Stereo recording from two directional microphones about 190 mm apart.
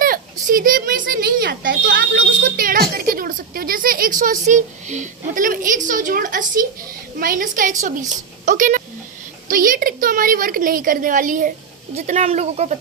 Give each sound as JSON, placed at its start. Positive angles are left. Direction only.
{"t": 0.0, "sound": "a child's voice", "side_deg": -45}